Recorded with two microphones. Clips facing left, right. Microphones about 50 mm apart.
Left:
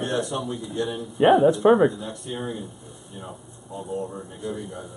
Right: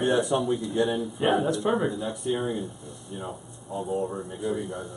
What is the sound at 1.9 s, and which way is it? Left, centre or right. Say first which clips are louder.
A man's voice: right 4 dB; centre.